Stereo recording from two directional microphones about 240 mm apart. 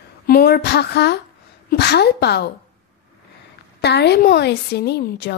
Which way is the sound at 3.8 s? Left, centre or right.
Left.